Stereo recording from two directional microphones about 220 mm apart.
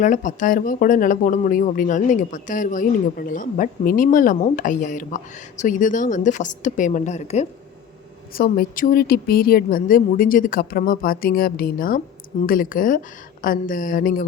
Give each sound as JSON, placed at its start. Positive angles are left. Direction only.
{"t": 0.0, "sound": "speech", "side_deg": 35}
{"t": 8.3, "sound": "speech", "side_deg": 40}